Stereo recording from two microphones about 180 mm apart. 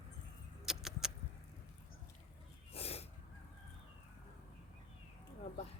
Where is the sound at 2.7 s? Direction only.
35° left (ahead or behind).